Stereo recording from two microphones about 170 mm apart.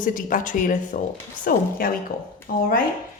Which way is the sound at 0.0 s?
50° left (ahead or behind).